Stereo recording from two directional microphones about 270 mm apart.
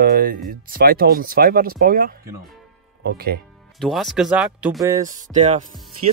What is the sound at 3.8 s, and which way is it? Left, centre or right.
Speech, centre.